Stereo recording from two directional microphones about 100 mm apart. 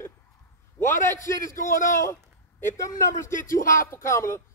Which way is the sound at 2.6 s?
30° left (ahead or behind).